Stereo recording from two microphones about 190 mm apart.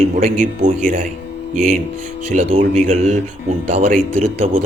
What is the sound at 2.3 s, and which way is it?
Speech, 35° right (ahead or behind).